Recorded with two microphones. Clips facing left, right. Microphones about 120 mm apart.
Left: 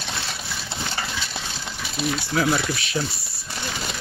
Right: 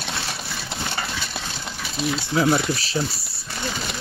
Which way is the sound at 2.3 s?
20° right (ahead or behind).